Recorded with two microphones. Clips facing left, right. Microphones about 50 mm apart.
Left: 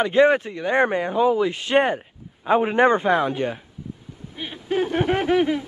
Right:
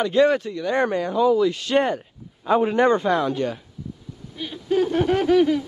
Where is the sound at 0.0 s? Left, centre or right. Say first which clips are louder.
Left 1 dB; left.